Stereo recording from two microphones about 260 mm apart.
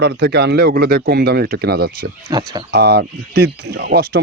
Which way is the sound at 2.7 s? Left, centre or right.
Right.